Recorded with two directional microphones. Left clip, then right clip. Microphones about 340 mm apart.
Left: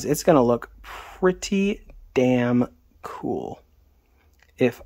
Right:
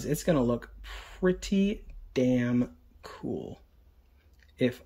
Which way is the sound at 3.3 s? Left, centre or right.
Left.